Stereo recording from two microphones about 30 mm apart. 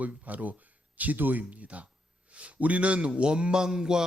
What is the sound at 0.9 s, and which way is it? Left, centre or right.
Speech, right.